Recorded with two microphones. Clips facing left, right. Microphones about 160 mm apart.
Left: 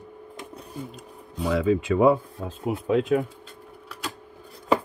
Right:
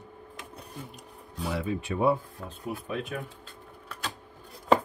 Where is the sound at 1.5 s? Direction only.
90° left.